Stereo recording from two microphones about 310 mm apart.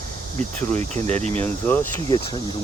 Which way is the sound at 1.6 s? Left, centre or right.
Centre.